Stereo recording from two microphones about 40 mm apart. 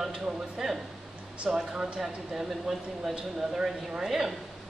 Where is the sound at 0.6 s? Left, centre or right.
Centre.